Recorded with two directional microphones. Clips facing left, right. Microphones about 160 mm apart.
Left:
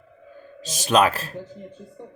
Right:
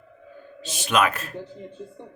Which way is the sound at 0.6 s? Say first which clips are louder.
Left 3 dB; 40° left (ahead or behind).